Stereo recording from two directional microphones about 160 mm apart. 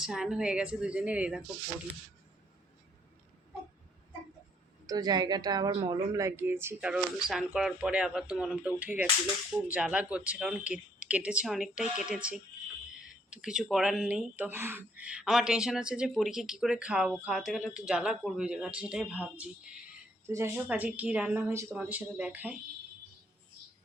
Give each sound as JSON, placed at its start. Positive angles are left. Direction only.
{"t": 0.0, "sound": "speech", "side_deg": -5}
{"t": 4.9, "sound": "a woman's voice", "side_deg": -25}